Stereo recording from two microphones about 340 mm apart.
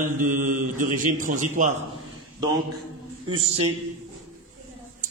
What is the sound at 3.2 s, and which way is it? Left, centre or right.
Speech, centre.